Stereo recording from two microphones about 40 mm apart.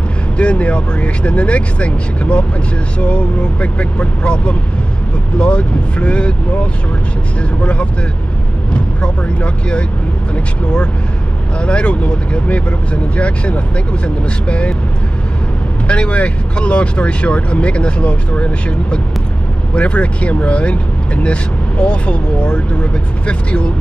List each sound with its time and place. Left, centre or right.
0.4 s speech: left
9.0 s speech: left
15.9 s speech: left